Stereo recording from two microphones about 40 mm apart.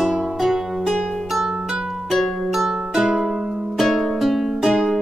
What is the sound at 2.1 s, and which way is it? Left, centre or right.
Music, centre.